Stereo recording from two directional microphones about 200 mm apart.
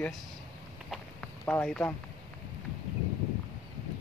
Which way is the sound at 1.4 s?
5° left (ahead or behind).